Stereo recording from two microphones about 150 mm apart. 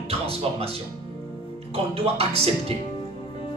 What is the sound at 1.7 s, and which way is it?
Speech, 40° right (ahead or behind).